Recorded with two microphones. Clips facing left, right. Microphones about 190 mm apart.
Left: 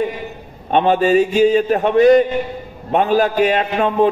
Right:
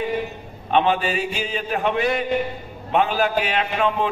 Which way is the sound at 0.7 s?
40° left (ahead or behind).